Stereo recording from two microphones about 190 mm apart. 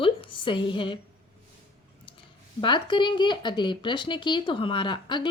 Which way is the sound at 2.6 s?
25° left (ahead or behind).